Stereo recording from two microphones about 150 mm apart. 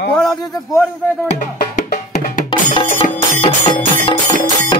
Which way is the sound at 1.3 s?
55° left (ahead or behind).